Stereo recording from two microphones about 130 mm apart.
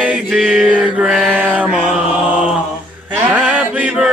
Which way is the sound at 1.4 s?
10° right (ahead or behind).